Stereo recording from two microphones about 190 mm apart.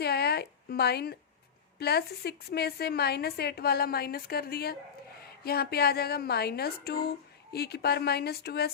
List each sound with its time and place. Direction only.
0.0 s speech: 55° left (ahead or behind)